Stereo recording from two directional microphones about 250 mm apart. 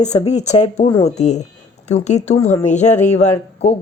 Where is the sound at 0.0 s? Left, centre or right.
Left.